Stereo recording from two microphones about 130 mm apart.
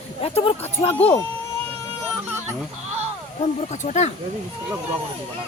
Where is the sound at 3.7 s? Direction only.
65° left (ahead or behind).